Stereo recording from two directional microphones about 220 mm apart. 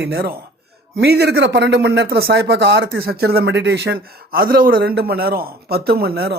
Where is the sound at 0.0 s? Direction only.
45° right (ahead or behind).